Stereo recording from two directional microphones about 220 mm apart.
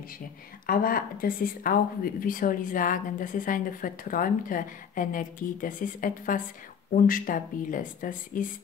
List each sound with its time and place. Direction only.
0.7 s a woman's voice: 40° left (ahead or behind)